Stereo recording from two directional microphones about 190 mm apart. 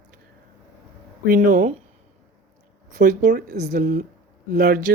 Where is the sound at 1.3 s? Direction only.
45° right (ahead or behind).